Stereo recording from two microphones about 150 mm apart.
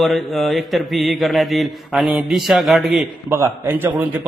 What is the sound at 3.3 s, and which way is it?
Speech, 20° right (ahead or behind).